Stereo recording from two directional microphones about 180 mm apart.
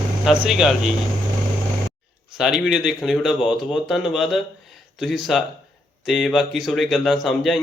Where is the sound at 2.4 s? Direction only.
Centre (ahead or behind).